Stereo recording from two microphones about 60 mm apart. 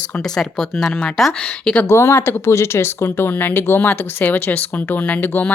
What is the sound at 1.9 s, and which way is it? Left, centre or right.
A woman's voice, left.